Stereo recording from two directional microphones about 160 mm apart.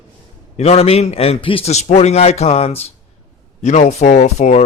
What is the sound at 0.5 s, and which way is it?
A man's voice, 40° left (ahead or behind).